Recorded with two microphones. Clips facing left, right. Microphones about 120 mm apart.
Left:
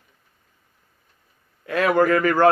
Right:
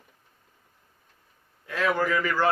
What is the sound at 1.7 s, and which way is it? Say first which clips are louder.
Speech: left 7 dB; 65° left (ahead or behind).